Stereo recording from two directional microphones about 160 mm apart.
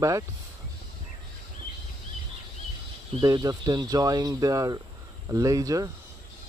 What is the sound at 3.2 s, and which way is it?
Speech, 20° right (ahead or behind).